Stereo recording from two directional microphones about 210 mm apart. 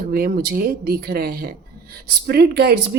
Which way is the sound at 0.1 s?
45° right (ahead or behind).